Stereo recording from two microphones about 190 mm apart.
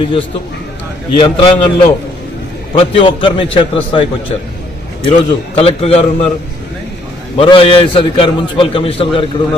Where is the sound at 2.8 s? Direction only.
25° left (ahead or behind).